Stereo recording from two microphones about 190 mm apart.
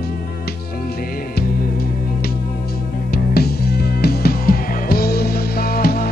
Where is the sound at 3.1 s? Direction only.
55° left (ahead or behind).